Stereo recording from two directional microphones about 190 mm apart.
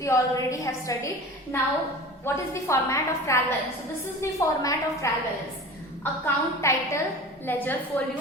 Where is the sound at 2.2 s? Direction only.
15° left (ahead or behind).